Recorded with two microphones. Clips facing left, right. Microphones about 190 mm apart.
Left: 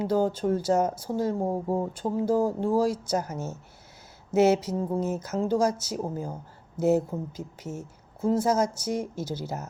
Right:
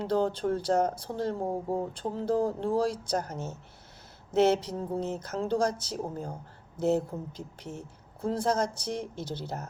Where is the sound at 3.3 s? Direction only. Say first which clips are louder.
Left 3 dB; 10° left (ahead or behind).